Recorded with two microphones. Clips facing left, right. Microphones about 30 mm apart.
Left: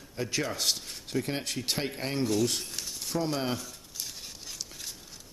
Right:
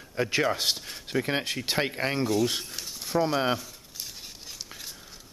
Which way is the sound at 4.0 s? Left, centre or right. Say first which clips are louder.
Even; centre.